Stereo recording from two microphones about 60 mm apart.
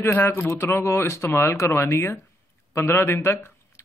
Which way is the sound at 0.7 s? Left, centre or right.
Left.